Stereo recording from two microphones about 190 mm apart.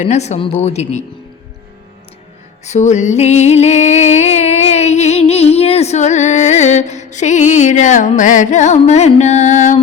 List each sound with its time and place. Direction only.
0.0 s music: 35° left (ahead or behind)
2.6 s music: 35° left (ahead or behind)